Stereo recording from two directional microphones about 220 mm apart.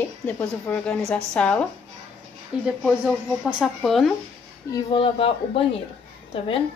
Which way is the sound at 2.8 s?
Centre (ahead or behind).